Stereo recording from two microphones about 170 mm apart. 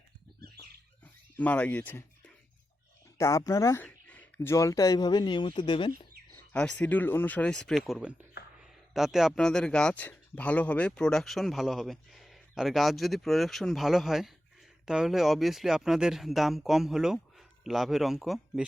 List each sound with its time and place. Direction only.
1.4 s speech: 10° left (ahead or behind)
3.2 s speech: 15° left (ahead or behind)
6.3 s speech: 5° left (ahead or behind)